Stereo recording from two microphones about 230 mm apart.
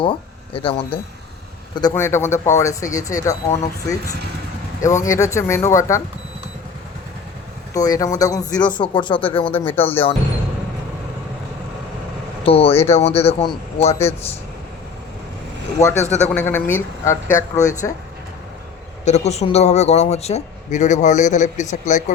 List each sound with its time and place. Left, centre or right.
0.0 s speech: left
7.7 s a man's voice: centre
12.5 s a man's voice: left
15.8 s speech: centre
17.6 s speech: left
19.0 s speech: left